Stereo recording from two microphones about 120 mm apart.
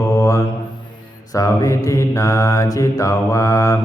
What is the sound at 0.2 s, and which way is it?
Mantra, 25° left (ahead or behind).